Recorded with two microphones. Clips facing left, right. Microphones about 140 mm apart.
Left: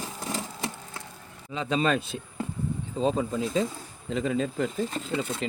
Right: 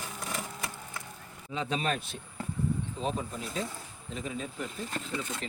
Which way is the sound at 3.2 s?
90° left.